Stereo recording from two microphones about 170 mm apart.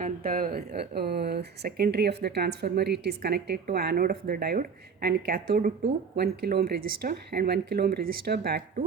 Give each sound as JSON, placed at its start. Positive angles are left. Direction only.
{"t": 0.0, "sound": "speech", "side_deg": -55}